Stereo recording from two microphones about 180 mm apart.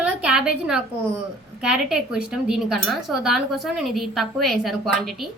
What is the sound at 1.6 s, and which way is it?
Speech, 5° right (ahead or behind).